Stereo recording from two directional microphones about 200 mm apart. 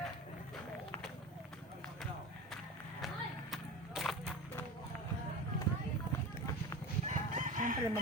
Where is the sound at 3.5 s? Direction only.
Centre (ahead or behind).